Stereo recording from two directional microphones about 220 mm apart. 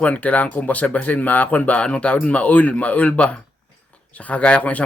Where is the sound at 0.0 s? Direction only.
5° left (ahead or behind).